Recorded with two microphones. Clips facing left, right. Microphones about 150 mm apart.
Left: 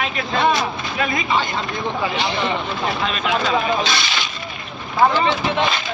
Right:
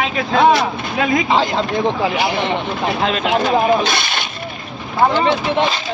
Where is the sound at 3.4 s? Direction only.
55° right (ahead or behind).